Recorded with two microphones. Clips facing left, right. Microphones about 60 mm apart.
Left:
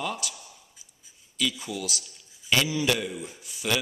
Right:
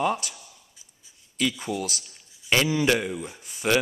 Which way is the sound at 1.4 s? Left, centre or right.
Right.